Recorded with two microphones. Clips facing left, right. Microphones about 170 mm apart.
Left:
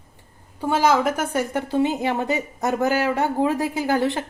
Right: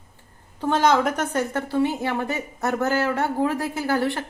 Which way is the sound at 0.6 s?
5° left (ahead or behind).